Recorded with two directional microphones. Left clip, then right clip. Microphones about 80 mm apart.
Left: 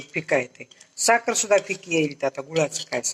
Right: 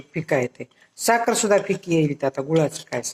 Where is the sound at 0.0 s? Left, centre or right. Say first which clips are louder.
Right 1 dB; right.